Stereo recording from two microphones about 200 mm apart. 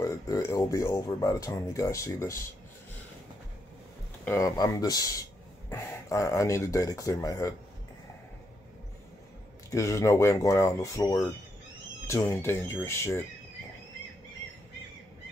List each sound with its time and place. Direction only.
0.0 s speech: 15° left (ahead or behind)
4.2 s speech: 15° left (ahead or behind)
9.7 s speech: 15° left (ahead or behind)